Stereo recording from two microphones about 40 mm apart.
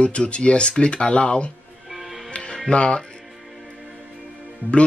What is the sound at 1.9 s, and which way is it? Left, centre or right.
Music, centre.